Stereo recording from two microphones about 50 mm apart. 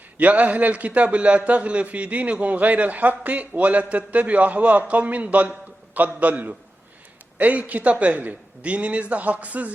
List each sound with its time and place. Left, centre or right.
0.2 s a man's voice: right